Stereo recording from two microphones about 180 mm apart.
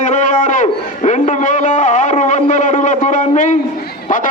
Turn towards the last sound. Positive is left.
turn(degrees=45)  # may be behind; listen again after turning